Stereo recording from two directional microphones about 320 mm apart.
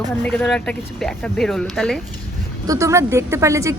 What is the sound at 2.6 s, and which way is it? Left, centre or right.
Speech, centre.